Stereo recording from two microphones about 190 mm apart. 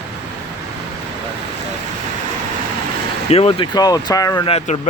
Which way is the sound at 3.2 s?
30° left (ahead or behind).